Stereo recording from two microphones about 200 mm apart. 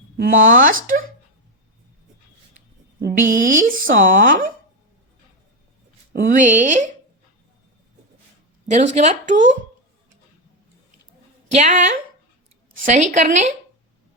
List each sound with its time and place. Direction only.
0.2 s speech: 40° right (ahead or behind)
3.0 s speech: 40° right (ahead or behind)
6.2 s speech: 40° right (ahead or behind)
8.6 s speech: 35° right (ahead or behind)
11.5 s speech: 35° right (ahead or behind)